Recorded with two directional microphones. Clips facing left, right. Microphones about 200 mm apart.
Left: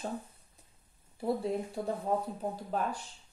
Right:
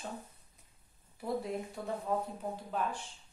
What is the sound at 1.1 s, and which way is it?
Speech, 30° left (ahead or behind).